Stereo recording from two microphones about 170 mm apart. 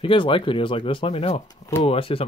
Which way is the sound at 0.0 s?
30° left (ahead or behind).